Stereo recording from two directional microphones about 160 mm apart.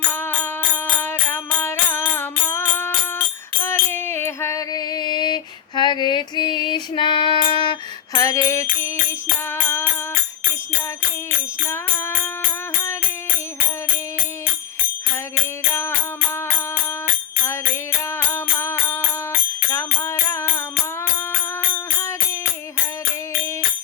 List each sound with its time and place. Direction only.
0.1 s music: 15° left (ahead or behind)
11.7 s music: 15° left (ahead or behind)
18.6 s music: 15° left (ahead or behind)
21.7 s music: 15° left (ahead or behind)